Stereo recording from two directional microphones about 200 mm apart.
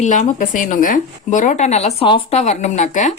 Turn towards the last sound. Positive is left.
turn(degrees=35)  # may be behind; listen again after turning